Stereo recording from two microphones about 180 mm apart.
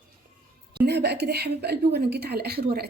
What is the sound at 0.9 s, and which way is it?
A woman's voice, 65° right (ahead or behind).